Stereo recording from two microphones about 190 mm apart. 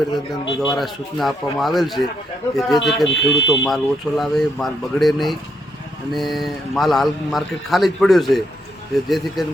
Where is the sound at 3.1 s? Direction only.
70° left (ahead or behind).